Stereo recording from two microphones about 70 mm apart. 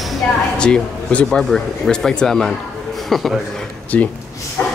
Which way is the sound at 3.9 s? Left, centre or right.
Left.